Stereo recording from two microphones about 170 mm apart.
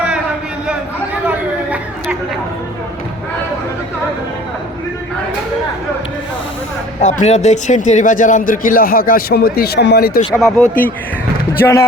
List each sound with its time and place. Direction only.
1.3 s chatter: 10° right (ahead or behind)
7.0 s a man's voice: 40° left (ahead or behind); by 10.1 s 70° left (ahead or behind)
10.4 s speech: 10° left (ahead or behind)